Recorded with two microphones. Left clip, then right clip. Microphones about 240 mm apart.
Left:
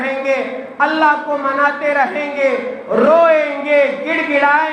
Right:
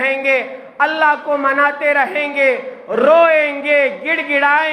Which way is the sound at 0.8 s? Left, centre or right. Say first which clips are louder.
Left 1 dB; right.